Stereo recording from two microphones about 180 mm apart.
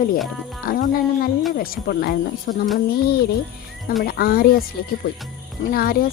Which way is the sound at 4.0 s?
55° left (ahead or behind).